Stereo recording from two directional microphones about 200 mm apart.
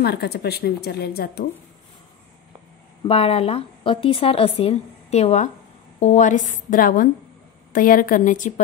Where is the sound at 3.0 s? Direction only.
30° left (ahead or behind).